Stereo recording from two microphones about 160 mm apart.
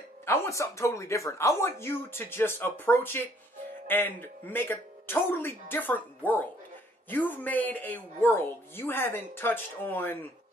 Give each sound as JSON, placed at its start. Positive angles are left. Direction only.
{"t": 0.2, "sound": "speech", "side_deg": 15}